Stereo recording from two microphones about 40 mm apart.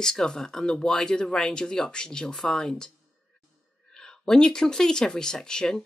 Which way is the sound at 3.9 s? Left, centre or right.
Centre.